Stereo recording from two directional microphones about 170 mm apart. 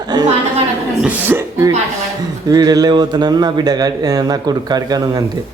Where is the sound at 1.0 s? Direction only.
10° right (ahead or behind).